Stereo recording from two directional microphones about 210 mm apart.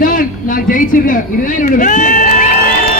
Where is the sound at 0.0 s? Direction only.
40° left (ahead or behind).